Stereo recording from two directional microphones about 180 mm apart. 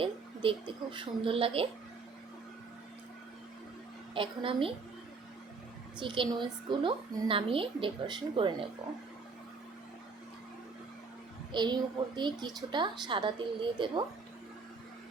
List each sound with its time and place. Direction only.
0.0 s a woman's voice: 30° right (ahead or behind)
4.1 s a woman's voice: 30° right (ahead or behind)
6.0 s a woman's voice: 25° right (ahead or behind)
11.5 s a woman's voice: 25° right (ahead or behind)